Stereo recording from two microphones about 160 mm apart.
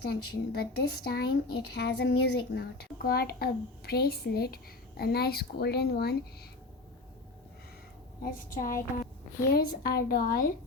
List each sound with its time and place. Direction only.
0.0 s speech: 80° left
8.2 s a woman's voice: 60° left (ahead or behind)
9.5 s a woman's voice: 75° left (ahead or behind)